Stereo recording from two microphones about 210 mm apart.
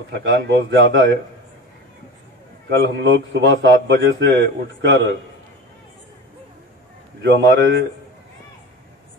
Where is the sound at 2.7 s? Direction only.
60° right (ahead or behind).